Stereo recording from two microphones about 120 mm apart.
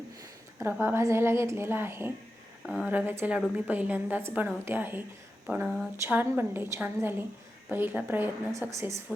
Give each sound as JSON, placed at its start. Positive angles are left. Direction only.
{"t": 0.6, "sound": "a woman's voice", "side_deg": -20}
{"t": 2.6, "sound": "a woman's voice", "side_deg": -5}
{"t": 6.1, "sound": "a woman's voice", "side_deg": -15}